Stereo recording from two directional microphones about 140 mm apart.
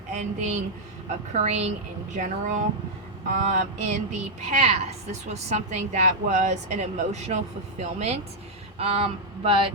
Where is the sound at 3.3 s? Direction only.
70° right (ahead or behind).